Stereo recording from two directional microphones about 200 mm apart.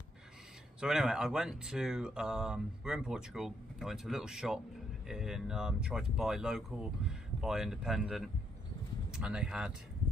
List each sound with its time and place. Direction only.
0.7 s speech: 5° right (ahead or behind)